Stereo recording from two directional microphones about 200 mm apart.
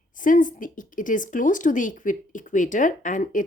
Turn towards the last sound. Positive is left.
turn(degrees=40)  # may be behind; listen again after turning